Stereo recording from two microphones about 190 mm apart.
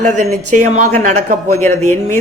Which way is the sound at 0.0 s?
40° right (ahead or behind).